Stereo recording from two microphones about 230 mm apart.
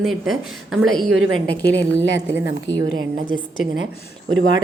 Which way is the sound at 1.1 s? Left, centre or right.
Right.